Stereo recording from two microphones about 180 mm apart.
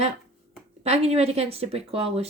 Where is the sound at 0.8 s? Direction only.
35° right (ahead or behind).